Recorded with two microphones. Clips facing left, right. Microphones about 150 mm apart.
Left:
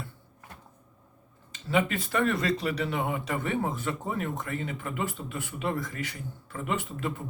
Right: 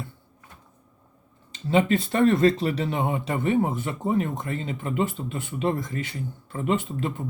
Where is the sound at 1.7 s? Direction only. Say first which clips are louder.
Right 5 dB; 25° right (ahead or behind).